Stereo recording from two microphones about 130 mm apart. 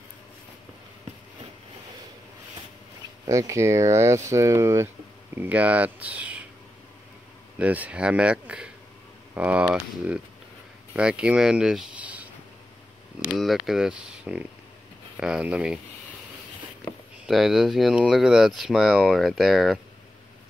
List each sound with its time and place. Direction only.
3.3 s speech: 25° right (ahead or behind)
5.4 s speech: 10° right (ahead or behind)
7.5 s speech: 10° right (ahead or behind)
13.3 s speech: centre (ahead or behind)
17.3 s speech: centre (ahead or behind)